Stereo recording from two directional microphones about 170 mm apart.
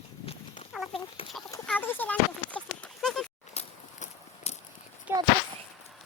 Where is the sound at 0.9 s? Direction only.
30° left (ahead or behind).